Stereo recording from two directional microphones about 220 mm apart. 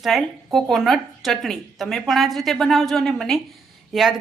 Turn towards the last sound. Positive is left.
turn(degrees=0)  # may be behind; listen again after turning